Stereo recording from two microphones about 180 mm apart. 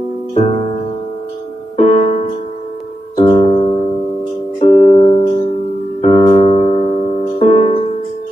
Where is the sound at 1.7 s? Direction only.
40° left (ahead or behind).